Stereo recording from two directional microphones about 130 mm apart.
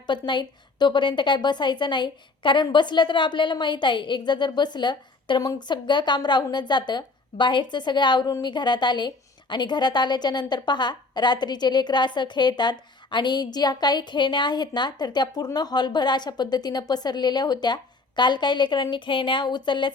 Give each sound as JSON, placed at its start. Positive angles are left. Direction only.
{"t": 0.1, "sound": "a woman's voice", "side_deg": 35}